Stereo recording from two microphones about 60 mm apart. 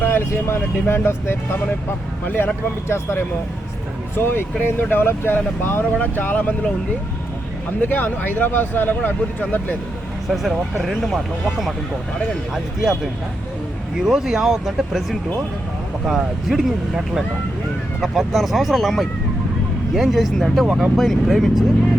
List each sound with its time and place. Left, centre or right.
0.0 s speech: left
2.2 s speech: left
2.9 s speech: left
5.9 s speech: left
7.8 s speech: left
10.2 s speech: centre
12.5 s speech: centre
14.0 s speech: centre